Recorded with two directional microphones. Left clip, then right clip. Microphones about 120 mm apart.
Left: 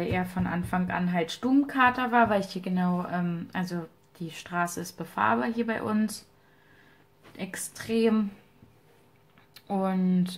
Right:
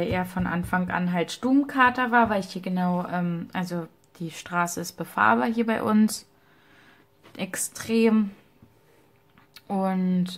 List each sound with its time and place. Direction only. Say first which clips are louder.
0.0 s a woman's voice: right 3 dB; 35° right (ahead or behind); by 6.1 s 50° right (ahead or behind)
7.3 s a woman's voice: right 5 dB; 50° right (ahead or behind); by 8.3 s 35° right (ahead or behind)
9.5 s speech: right 2 dB; 25° right (ahead or behind)